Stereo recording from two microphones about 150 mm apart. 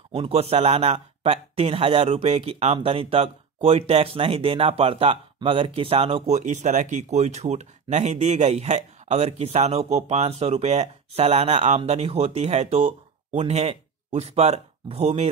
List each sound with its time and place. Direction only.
0.1 s speech: 40° right (ahead or behind)